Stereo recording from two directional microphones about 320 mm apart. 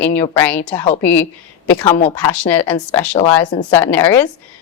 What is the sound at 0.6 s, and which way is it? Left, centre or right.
Speech, centre.